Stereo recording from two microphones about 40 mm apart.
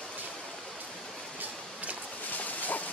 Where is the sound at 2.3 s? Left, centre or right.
Left.